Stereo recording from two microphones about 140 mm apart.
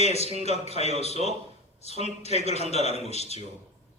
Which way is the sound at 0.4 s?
50° left (ahead or behind).